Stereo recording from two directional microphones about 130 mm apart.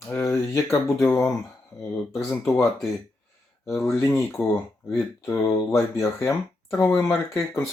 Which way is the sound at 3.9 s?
20° left (ahead or behind).